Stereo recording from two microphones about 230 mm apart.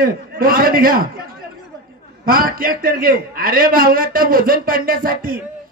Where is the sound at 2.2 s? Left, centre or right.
Right.